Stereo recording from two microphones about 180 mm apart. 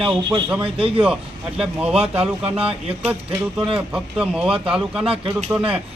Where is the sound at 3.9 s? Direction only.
5° right (ahead or behind).